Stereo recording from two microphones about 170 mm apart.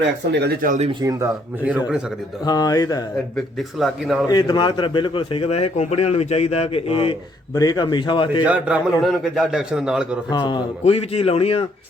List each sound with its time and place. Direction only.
0.3 s speech: 75° right (ahead or behind)
1.0 s speech: 15° right (ahead or behind)
2.4 s speech: 25° left (ahead or behind)
3.3 s a man's voice: centre (ahead or behind)
4.3 s a man's voice: 25° left (ahead or behind)
8.4 s a man's voice: 5° right (ahead or behind)
10.2 s a man's voice: 25° left (ahead or behind)